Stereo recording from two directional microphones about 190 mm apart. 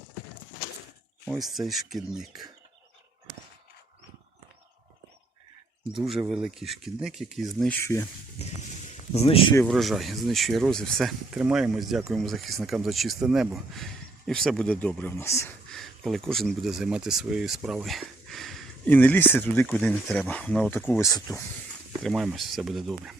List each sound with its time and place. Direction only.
1.3 s speech: centre (ahead or behind)
6.0 s speech: centre (ahead or behind)
7.6 s speech: 10° left (ahead or behind)
9.1 s speech: 30° left (ahead or behind)
9.6 s speech: centre (ahead or behind)
15.7 s speech: centre (ahead or behind); by 21.4 s 15° left (ahead or behind)
22.0 s speech: centre (ahead or behind)